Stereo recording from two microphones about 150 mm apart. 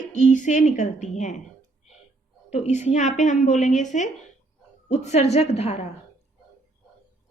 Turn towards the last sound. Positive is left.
turn(degrees=45)  # may be behind; listen again after turning